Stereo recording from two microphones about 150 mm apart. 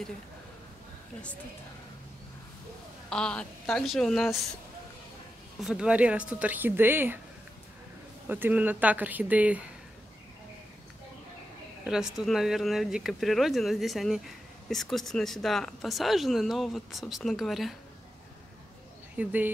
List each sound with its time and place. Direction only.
3.1 s speech: 5° left (ahead or behind)
5.6 s speech: 5° right (ahead or behind)
8.3 s speech: 10° right (ahead or behind)
11.8 s speech: 5° right (ahead or behind)
19.1 s speech: 10° right (ahead or behind)